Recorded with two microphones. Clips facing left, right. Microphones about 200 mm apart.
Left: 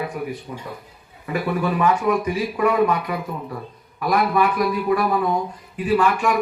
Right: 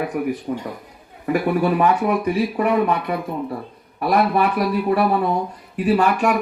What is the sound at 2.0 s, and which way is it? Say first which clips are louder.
Speech: right 1 dB; 60° right (ahead or behind).